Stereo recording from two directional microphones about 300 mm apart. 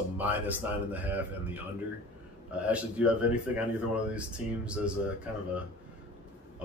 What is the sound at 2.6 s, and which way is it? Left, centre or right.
Speech, centre.